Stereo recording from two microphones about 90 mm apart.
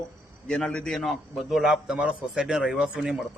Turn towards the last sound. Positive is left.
turn(degrees=-5)  # may be behind; listen again after turning